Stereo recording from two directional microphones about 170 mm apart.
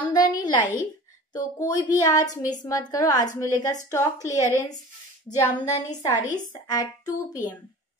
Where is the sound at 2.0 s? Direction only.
20° left (ahead or behind).